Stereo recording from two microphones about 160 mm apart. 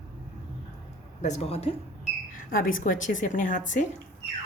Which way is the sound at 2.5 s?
60° left (ahead or behind).